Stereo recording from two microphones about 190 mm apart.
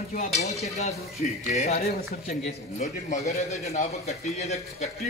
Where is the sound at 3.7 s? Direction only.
35° left (ahead or behind).